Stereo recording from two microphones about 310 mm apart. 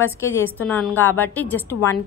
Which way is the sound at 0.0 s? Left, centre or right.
Centre.